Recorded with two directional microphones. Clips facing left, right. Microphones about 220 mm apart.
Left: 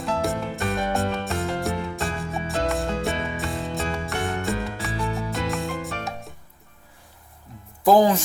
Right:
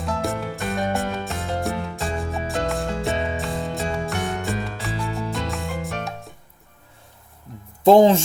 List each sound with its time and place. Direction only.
0.0 s music: centre (ahead or behind)
7.9 s speech: 25° right (ahead or behind)